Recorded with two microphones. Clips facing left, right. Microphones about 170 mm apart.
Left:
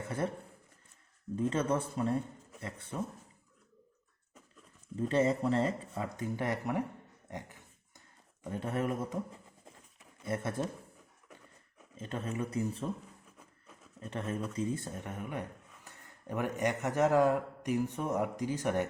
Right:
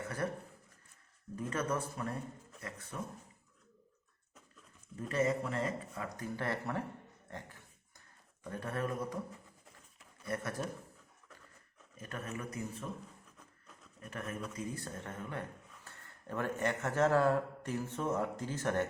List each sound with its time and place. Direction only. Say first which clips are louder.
1.4 s speech: left 5 dB; 25° left (ahead or behind)
4.9 s speech: left 4 dB; 30° left (ahead or behind)
7.3 s dog: left 4 dB; 15° left (ahead or behind)
8.4 s speech: left 4 dB; 20° left (ahead or behind)
10.2 s speech: left 4 dB; 25° left (ahead or behind)
11.3 s a sound: left 4 dB; 15° left (ahead or behind)
11.9 s speech: left 6 dB; 25° left (ahead or behind)
14.0 s speech: left 5 dB; 30° left (ahead or behind)